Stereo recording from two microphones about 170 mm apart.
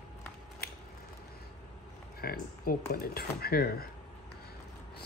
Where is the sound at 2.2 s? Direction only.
60° left (ahead or behind).